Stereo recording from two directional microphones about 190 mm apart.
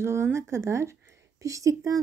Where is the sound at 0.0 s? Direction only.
15° right (ahead or behind).